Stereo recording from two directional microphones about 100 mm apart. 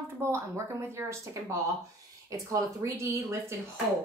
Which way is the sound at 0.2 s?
25° right (ahead or behind).